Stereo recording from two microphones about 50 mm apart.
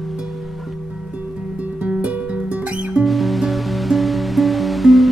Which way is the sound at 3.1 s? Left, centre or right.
Centre.